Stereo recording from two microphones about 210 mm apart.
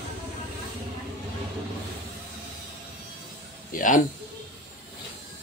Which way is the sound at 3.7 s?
40° left (ahead or behind).